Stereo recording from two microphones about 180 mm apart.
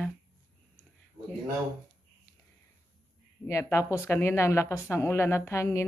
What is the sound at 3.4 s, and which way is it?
A woman's voice, 15° left (ahead or behind).